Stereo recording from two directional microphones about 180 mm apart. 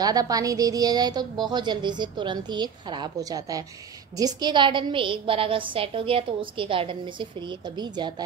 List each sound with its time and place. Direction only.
0.0 s a woman's voice: 20° right (ahead or behind)